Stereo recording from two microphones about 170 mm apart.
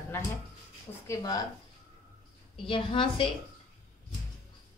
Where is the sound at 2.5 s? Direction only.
30° left (ahead or behind).